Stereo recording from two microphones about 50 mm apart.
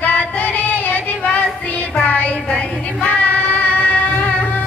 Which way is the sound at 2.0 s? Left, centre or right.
Left.